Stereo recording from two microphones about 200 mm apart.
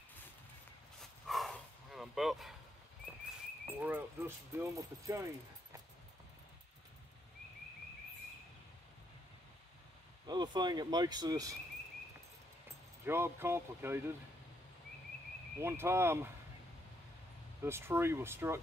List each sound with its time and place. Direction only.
1.2 s bow-wow: centre (ahead or behind)
3.6 s speech: 10° right (ahead or behind)
10.2 s speech: 20° right (ahead or behind)
13.0 s speech: 10° right (ahead or behind)
15.6 s speech: 10° right (ahead or behind)
17.6 s speech: 10° right (ahead or behind)